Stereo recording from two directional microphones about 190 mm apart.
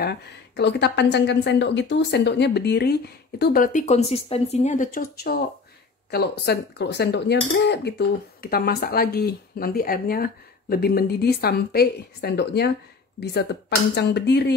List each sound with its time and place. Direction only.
0.0 s speech: 60° left (ahead or behind)